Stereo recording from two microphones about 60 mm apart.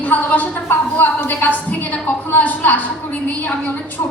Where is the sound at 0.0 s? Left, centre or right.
Left.